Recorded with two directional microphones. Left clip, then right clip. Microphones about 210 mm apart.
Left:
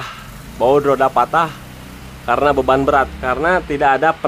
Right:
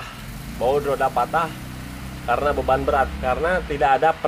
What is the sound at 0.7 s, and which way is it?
A man's voice, 40° left (ahead or behind).